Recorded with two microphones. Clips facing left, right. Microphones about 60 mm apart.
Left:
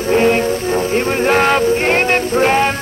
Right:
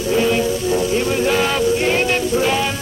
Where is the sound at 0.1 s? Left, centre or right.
Left.